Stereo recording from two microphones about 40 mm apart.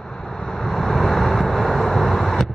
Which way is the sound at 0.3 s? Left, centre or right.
Centre.